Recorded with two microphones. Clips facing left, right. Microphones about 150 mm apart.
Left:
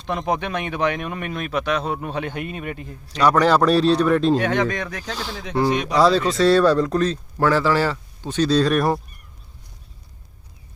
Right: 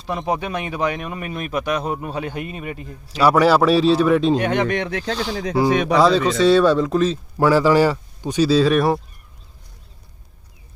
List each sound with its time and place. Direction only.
0.0 s speech: 5° right (ahead or behind)
4.4 s speech: 15° right (ahead or behind)
5.1 s speech: centre (ahead or behind)